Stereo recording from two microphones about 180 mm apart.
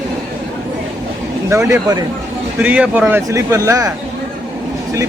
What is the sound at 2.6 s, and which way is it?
Speech, 10° right (ahead or behind).